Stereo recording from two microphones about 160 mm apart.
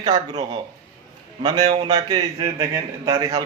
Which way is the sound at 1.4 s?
25° right (ahead or behind).